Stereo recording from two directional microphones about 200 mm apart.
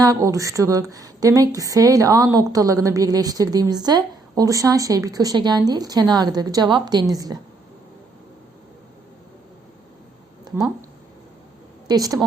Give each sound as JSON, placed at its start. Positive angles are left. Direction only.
{"t": 0.0, "sound": "a woman's voice", "side_deg": -15}
{"t": 11.9, "sound": "a woman's voice", "side_deg": -20}